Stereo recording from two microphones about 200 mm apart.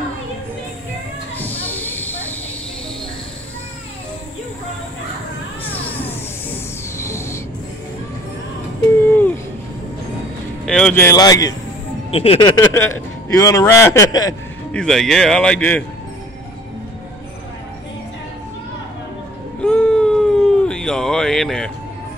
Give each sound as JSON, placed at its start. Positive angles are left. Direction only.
{"t": 1.4, "sound": "hiss", "side_deg": 10}
{"t": 5.6, "sound": "music", "side_deg": 10}
{"t": 9.1, "sound": "music", "side_deg": 10}
{"t": 10.6, "sound": "speech", "side_deg": 5}
{"t": 11.1, "sound": "speech", "side_deg": 20}
{"t": 12.1, "sound": "speech", "side_deg": 30}
{"t": 14.7, "sound": "speech", "side_deg": 5}
{"t": 19.6, "sound": "a sound", "side_deg": 5}